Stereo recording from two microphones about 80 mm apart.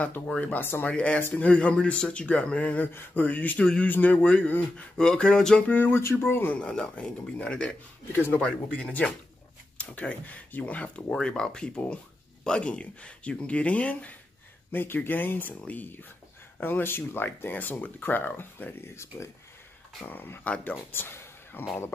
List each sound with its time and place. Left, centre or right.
0.0 s speech: centre
0.9 s speech: centre
5.7 s speech: left
6.6 s speech: centre
8.1 s speech: left
8.4 s speech: centre
20.1 s speech: left
20.9 s a sound: left